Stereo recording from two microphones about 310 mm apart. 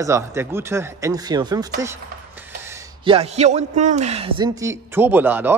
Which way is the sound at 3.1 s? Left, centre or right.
Centre.